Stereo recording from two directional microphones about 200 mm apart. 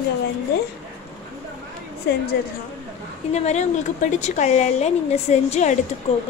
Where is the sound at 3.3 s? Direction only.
35° left (ahead or behind).